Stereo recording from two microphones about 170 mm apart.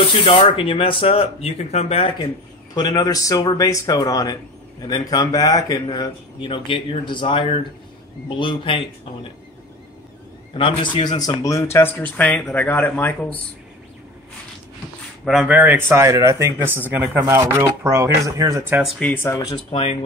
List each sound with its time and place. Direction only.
0.0 s speech: 30° left (ahead or behind)
2.7 s speech: 25° left (ahead or behind)
10.5 s speech: 30° left (ahead or behind); by 13.4 s 10° left (ahead or behind)
15.2 s speech: 5° right (ahead or behind)
18.9 s speech: 10° left (ahead or behind)
19.5 s speech: 35° left (ahead or behind)